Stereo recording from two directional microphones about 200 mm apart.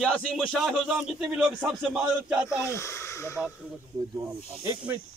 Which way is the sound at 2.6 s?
15° left (ahead or behind).